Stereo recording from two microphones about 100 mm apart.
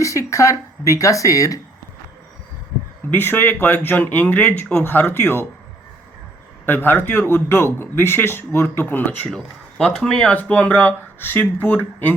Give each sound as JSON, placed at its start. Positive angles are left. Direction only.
{"t": 0.0, "sound": "speech", "side_deg": 30}
{"t": 3.1, "sound": "a man's voice", "side_deg": 20}
{"t": 6.7, "sound": "a man's voice", "side_deg": 20}